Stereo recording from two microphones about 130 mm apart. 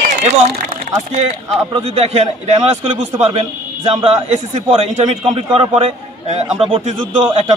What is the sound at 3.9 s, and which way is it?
A man's voice, 50° right (ahead or behind).